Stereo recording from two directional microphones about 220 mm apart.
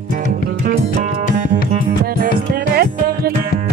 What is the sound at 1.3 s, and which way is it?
Music, 35° right (ahead or behind).